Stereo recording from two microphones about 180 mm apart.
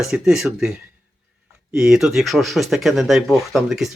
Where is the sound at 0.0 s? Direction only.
5° right (ahead or behind).